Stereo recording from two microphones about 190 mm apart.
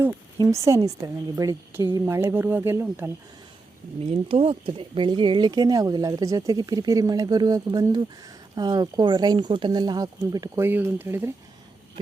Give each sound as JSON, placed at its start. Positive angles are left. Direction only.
{"t": 0.3, "sound": "a woman's voice", "side_deg": -15}
{"t": 4.0, "sound": "speech", "side_deg": -30}